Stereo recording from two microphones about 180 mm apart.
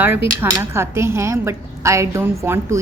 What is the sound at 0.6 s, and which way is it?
A woman's voice, 15° right (ahead or behind).